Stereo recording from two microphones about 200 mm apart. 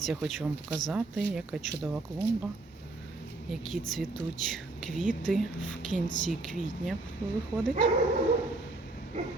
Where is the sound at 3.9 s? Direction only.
Centre (ahead or behind).